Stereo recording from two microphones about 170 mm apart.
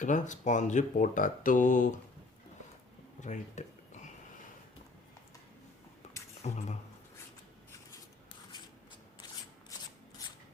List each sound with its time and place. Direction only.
0.0 s speech: 45° left (ahead or behind)
3.2 s a sound: 45° left (ahead or behind)
6.4 s speech: 40° left (ahead or behind)
9.2 s shuffling cards: 25° left (ahead or behind)
10.2 s scissors: 20° left (ahead or behind)